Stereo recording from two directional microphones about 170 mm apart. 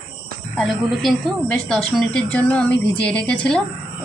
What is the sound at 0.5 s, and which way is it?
A woman's voice, centre (ahead or behind).